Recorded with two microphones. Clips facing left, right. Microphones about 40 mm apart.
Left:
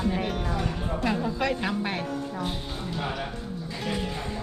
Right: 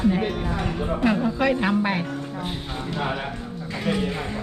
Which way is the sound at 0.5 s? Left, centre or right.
Right.